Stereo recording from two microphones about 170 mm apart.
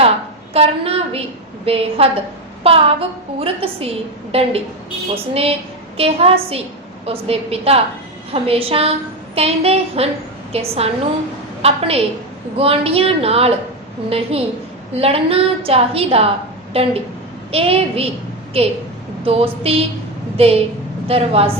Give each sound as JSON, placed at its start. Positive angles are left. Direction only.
{"t": 0.5, "sound": "a woman's voice", "side_deg": -35}